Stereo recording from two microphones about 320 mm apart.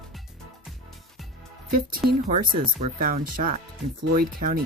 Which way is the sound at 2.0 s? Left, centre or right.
Right.